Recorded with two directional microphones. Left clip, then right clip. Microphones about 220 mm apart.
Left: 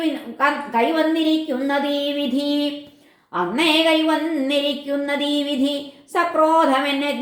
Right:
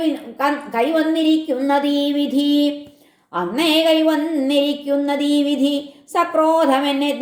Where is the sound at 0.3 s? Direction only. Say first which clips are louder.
Left 1 dB; 35° right (ahead or behind).